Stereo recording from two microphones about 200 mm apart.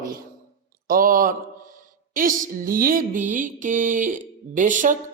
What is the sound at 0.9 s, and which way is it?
Speech, 45° right (ahead or behind).